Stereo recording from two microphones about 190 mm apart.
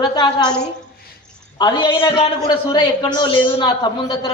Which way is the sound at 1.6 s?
25° left (ahead or behind).